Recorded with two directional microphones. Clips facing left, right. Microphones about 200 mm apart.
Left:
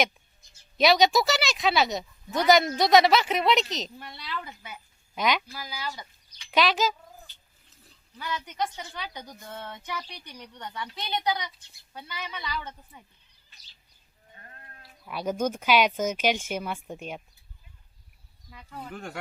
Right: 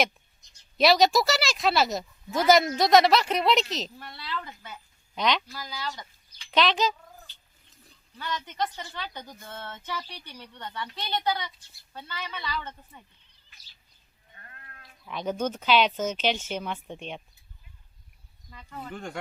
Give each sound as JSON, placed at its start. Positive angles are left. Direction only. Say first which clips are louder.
{"t": 0.8, "sound": "a woman's voice", "louder": "even", "side_deg": 0}
{"t": 14.3, "sound": "sheep", "louder": "left 1 dB", "side_deg": 25}
{"t": 15.0, "sound": "speech", "louder": "left 1 dB", "side_deg": 5}
{"t": 18.5, "sound": "a woman's voice", "louder": "right 1 dB", "side_deg": 5}